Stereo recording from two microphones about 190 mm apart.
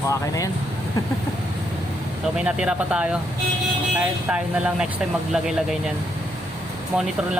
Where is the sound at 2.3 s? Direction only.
5° right (ahead or behind).